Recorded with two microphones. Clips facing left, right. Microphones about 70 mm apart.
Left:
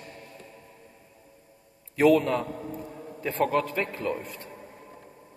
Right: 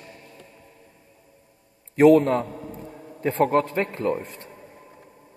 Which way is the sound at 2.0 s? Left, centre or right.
Right.